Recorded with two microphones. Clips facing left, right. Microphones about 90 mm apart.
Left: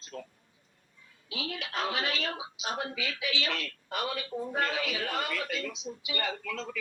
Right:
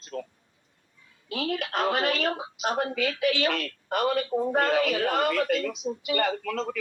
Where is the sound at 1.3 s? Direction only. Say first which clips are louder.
Right 8 dB; 55° right (ahead or behind).